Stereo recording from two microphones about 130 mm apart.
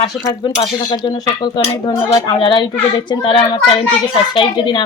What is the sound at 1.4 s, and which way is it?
A child's voice, 35° left (ahead or behind).